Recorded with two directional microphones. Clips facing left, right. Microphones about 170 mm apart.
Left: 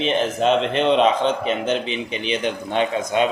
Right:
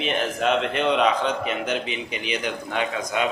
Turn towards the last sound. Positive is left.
turn(degrees=25)  # may be behind; listen again after turning